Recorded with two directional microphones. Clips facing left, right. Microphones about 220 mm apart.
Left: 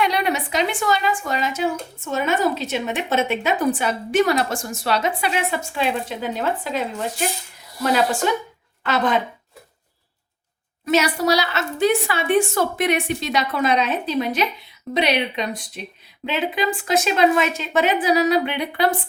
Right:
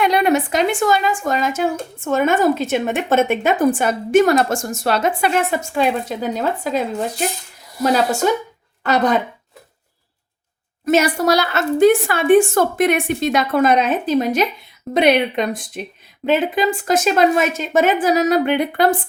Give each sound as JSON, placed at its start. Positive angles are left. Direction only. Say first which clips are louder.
{"t": 0.0, "sound": "a woman's voice", "louder": "right 6 dB", "side_deg": -50}
{"t": 10.8, "sound": "a woman's voice", "louder": "right 3 dB", "side_deg": -50}